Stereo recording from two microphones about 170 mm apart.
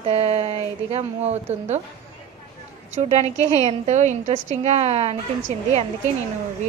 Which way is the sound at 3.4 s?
20° left (ahead or behind).